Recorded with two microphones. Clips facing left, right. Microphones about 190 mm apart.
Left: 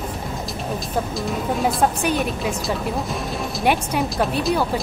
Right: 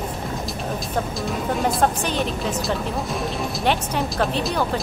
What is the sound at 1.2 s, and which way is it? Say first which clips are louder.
Speech: left 1 dB; centre (ahead or behind).